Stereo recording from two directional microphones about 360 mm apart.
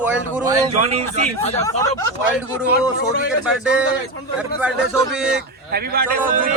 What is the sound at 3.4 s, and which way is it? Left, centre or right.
A man's voice, centre.